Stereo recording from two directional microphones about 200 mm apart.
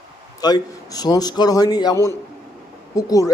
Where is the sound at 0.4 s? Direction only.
20° left (ahead or behind).